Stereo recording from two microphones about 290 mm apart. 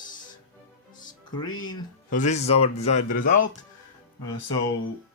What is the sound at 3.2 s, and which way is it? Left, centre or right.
Speech, left.